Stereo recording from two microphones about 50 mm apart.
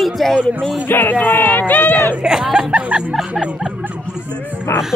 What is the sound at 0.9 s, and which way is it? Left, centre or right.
Music, left.